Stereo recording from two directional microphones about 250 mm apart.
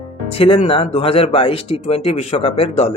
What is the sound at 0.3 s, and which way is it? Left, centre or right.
Speech, left.